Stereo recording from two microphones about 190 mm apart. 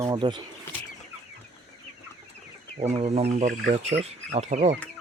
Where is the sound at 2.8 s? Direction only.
35° right (ahead or behind).